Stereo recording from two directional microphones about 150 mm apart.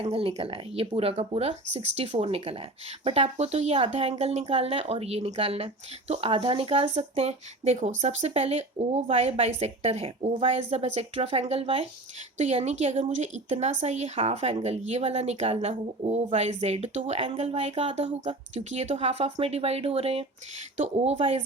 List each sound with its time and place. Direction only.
0.0 s speech: 40° right (ahead or behind)